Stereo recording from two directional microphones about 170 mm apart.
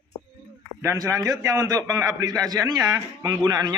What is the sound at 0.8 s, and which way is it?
A man's voice, 15° right (ahead or behind).